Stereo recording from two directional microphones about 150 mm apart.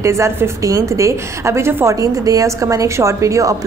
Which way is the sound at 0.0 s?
20° right (ahead or behind).